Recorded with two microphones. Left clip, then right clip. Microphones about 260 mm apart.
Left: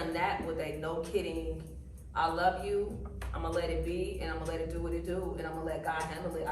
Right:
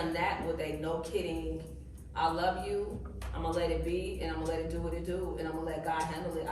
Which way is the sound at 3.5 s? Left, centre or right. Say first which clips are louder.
Right 2 dB; centre.